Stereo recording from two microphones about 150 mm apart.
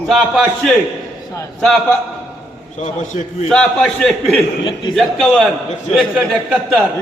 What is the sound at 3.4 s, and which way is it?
A man's voice, 5° left (ahead or behind).